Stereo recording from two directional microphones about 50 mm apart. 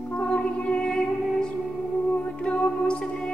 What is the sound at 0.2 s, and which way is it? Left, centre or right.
Music, left.